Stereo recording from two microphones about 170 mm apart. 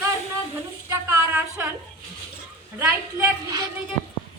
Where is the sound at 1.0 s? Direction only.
15° right (ahead or behind).